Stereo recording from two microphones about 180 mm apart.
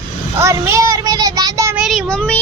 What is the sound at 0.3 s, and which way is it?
Child singing, 15° right (ahead or behind).